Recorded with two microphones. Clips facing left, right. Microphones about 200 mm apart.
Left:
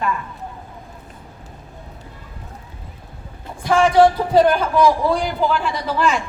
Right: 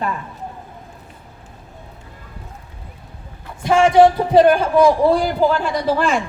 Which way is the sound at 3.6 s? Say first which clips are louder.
Right 2 dB; 25° right (ahead or behind).